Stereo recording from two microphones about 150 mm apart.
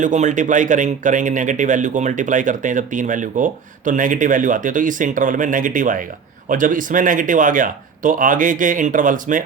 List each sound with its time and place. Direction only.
0.0 s speech: 55° right (ahead or behind)